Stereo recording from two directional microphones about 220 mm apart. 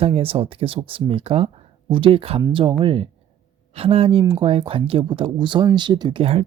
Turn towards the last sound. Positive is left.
turn(degrees=-25)  # may be behind; listen again after turning